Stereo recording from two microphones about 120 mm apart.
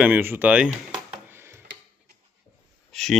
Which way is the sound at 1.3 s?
20° right (ahead or behind).